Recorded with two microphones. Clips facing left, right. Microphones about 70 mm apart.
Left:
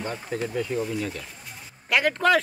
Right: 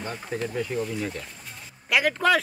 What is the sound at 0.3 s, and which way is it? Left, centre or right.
Speech, centre.